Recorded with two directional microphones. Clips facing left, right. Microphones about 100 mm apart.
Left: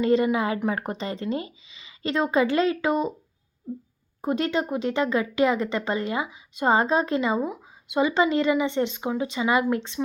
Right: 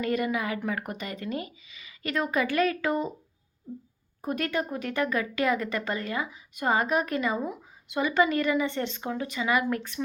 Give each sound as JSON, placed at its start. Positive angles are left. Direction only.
{"t": 0.0, "sound": "a woman's voice", "side_deg": 25}
{"t": 4.2, "sound": "a woman's voice", "side_deg": 25}